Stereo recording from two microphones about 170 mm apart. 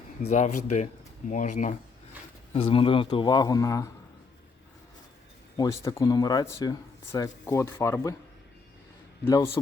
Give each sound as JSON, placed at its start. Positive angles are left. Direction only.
{"t": 0.2, "sound": "speech", "side_deg": 40}
{"t": 2.5, "sound": "speech", "side_deg": 35}
{"t": 5.5, "sound": "speech", "side_deg": 20}
{"t": 9.2, "sound": "speech", "side_deg": 15}